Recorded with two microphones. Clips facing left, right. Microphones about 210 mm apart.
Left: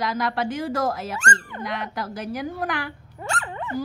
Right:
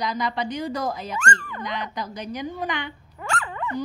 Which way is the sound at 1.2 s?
25° left (ahead or behind).